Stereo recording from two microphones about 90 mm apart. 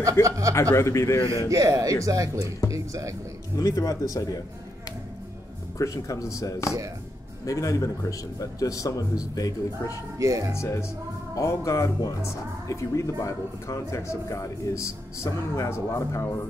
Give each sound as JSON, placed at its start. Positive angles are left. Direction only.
{"t": 0.2, "sound": "speech", "side_deg": -35}
{"t": 0.7, "sound": "speech", "side_deg": 35}
{"t": 1.5, "sound": "speech", "side_deg": -35}
{"t": 3.5, "sound": "speech", "side_deg": 40}
{"t": 5.8, "sound": "speech", "side_deg": 35}
{"t": 10.1, "sound": "speech", "side_deg": -35}
{"t": 10.5, "sound": "speech", "side_deg": 30}